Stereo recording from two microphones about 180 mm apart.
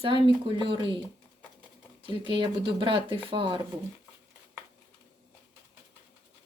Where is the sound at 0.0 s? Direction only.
30° right (ahead or behind).